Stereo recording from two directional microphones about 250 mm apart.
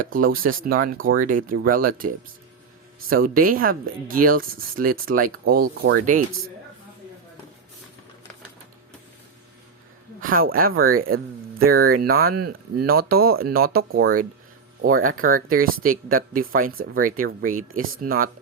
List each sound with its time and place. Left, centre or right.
0.0 s speech: right
10.2 s speech: right